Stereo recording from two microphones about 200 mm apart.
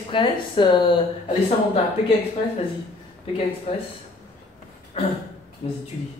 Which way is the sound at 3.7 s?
30° left (ahead or behind).